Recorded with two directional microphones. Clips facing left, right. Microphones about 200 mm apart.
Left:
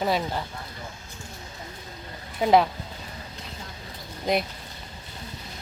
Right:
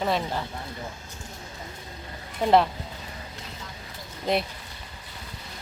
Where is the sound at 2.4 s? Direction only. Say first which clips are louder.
Left 1 dB; 5° left (ahead or behind).